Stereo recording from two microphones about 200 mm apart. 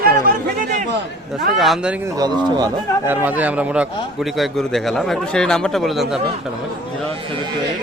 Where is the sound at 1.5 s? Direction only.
Centre (ahead or behind).